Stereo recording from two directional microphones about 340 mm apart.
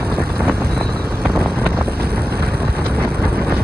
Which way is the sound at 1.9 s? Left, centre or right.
Right.